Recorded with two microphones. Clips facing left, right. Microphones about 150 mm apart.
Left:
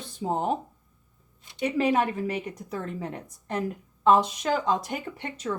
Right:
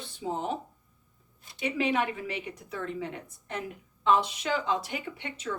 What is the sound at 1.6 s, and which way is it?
Speech, 40° left (ahead or behind).